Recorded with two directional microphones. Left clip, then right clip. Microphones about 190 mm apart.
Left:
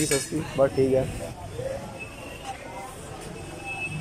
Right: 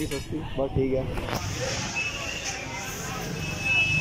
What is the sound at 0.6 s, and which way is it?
Speech, 35° left (ahead or behind).